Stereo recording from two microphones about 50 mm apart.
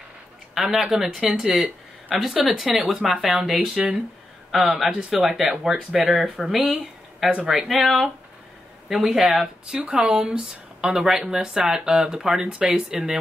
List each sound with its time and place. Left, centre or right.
0.6 s speech: centre
3.7 s speech: right
4.7 s speech: centre
6.6 s a sound: centre
7.4 s speech: centre
9.8 s speech: right